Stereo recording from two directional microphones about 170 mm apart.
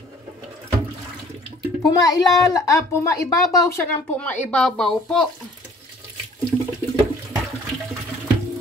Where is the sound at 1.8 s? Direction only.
20° left (ahead or behind); by 5.2 s 5° left (ahead or behind).